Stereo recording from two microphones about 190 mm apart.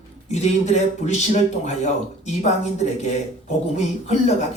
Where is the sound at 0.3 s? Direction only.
35° left (ahead or behind).